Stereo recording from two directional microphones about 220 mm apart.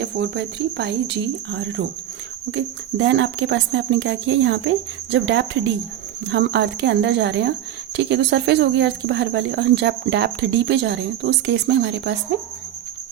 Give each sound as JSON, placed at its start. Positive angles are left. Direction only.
{"t": 0.0, "sound": "speech", "side_deg": -50}